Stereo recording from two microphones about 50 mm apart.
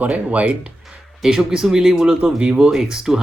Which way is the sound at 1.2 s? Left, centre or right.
Centre.